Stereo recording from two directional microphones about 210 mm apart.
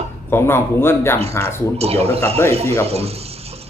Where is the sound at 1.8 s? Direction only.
30° right (ahead or behind).